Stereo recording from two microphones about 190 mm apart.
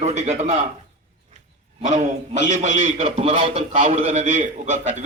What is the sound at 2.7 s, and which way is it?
A man's voice, 35° right (ahead or behind).